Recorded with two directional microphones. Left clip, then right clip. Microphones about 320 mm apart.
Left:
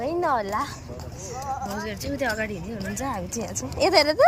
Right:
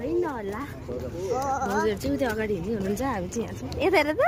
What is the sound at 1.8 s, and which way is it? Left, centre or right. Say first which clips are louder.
Speech: right 3 dB; centre.